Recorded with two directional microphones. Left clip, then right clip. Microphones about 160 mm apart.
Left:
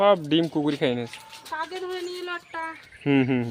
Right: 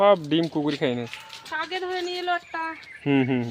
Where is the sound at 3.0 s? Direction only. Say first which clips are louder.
Even; 5° left (ahead or behind).